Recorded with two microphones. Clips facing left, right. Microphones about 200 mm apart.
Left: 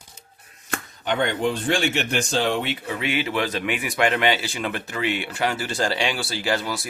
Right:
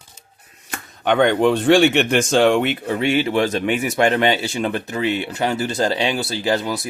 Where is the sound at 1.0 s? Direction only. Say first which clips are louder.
Right 8 dB; 75° right (ahead or behind).